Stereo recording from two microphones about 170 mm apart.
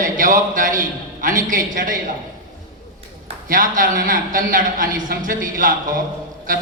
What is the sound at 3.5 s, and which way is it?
A man's voice, 50° right (ahead or behind).